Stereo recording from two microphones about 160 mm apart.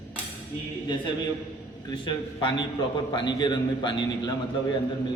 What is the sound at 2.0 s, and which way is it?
A man's voice, 30° left (ahead or behind).